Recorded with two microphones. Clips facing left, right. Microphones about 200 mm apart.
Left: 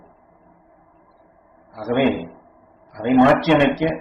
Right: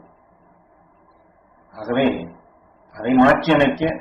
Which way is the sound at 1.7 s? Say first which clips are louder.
Left 1 dB; 10° left (ahead or behind).